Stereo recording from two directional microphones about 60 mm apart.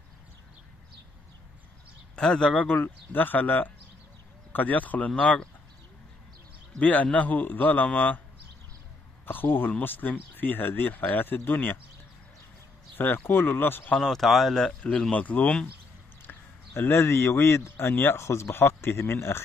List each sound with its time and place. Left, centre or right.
2.1 s speech: centre
2.8 s a man's voice: left
6.8 s a man's voice: left
9.2 s speech: left
12.9 s speech: left
13.9 s speech: centre
14.8 s a man's voice: centre
16.3 s speech: left